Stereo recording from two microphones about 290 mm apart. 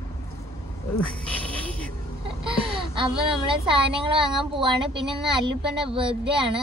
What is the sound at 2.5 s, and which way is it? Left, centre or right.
Speech, centre.